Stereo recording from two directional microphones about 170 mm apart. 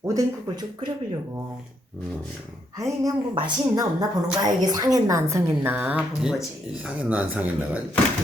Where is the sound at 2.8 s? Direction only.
20° right (ahead or behind).